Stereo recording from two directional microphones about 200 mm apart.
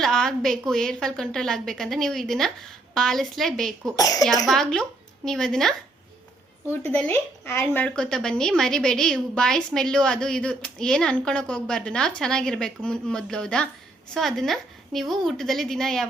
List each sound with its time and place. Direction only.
0.0 s a sound: centre (ahead or behind)
0.7 s speech: centre (ahead or behind)
3.9 s speech: 15° left (ahead or behind)
4.4 s speech: centre (ahead or behind)